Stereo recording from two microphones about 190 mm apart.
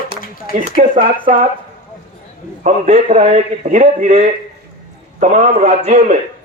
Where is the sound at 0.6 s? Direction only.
35° right (ahead or behind).